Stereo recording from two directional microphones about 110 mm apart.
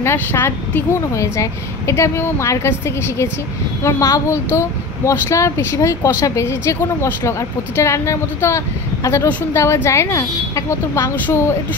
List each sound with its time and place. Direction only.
0.0 s speech: 20° left (ahead or behind)